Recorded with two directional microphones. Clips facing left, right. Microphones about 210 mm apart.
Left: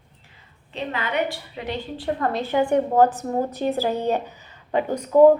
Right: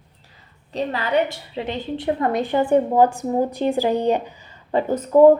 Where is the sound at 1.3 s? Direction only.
25° right (ahead or behind).